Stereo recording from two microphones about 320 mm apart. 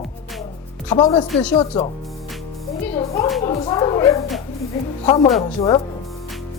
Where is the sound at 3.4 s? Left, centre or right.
Centre.